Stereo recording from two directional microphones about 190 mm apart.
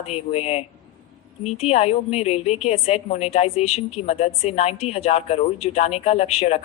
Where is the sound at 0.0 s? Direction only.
35° left (ahead or behind).